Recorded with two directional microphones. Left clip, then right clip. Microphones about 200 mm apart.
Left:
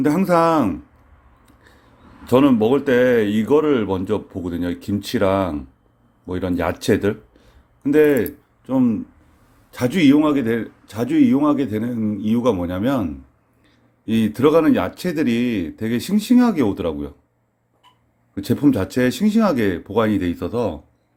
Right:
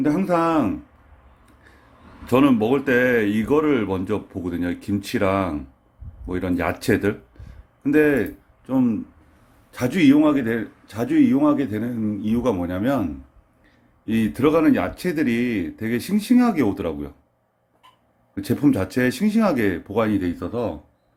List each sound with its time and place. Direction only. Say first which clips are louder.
0.0 s speech: left 4 dB; 35° left (ahead or behind)
2.2 s a man's voice: left 3 dB; 15° left (ahead or behind)
18.3 s a man's voice: left 2 dB; 20° left (ahead or behind)